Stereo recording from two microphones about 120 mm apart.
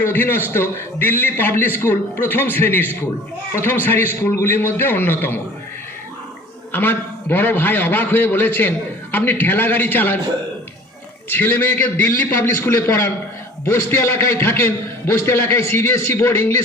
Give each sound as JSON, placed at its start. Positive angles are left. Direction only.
{"t": 0.0, "sound": "a man's voice", "side_deg": 20}
{"t": 6.7, "sound": "a man's voice", "side_deg": 20}
{"t": 11.3, "sound": "a man's voice", "side_deg": 15}